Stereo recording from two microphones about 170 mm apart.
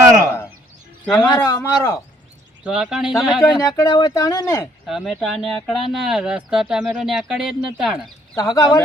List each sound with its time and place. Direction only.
1.2 s speech: 25° left (ahead or behind)
2.6 s speech: 5° right (ahead or behind)
3.5 s speech: 20° left (ahead or behind)
4.9 s speech: centre (ahead or behind)
8.4 s speech: 20° left (ahead or behind)